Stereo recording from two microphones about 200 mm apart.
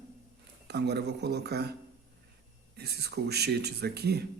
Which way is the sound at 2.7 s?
55° right (ahead or behind).